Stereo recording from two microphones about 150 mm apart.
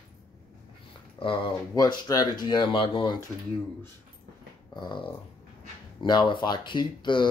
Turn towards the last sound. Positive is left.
turn(degrees=30)  # may be behind; listen again after turning